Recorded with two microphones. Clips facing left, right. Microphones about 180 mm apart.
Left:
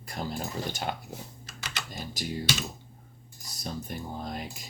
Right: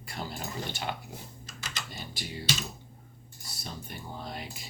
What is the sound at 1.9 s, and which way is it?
Speech, 45° left (ahead or behind).